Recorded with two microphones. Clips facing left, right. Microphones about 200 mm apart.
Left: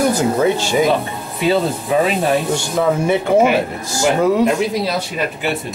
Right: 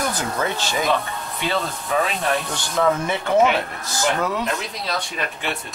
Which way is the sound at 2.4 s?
15° left (ahead or behind).